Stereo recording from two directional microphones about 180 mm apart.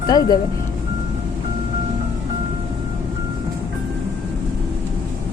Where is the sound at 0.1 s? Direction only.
20° left (ahead or behind).